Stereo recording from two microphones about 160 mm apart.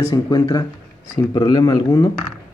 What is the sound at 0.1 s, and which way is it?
A man's voice, 25° left (ahead or behind).